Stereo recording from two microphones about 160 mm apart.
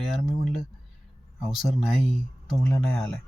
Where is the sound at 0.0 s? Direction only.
Centre (ahead or behind).